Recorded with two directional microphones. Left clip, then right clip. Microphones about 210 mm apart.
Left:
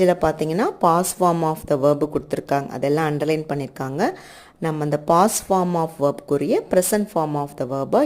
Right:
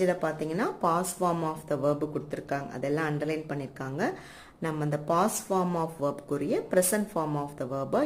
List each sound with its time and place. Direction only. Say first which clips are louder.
0.0 s speech: left 10 dB; 35° left (ahead or behind)